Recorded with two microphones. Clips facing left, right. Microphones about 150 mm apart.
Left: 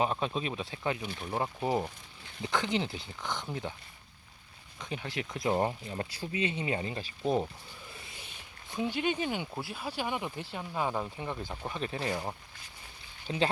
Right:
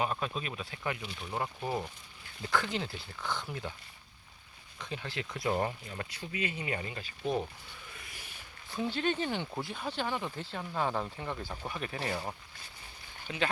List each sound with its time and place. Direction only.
0.0 s speech: 25° left (ahead or behind)
4.8 s speech: 15° left (ahead or behind)
13.2 s speech: 30° left (ahead or behind)